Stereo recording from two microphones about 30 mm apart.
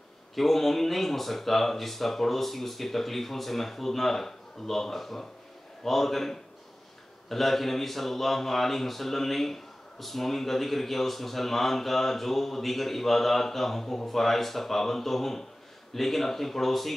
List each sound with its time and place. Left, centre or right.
0.4 s speech: centre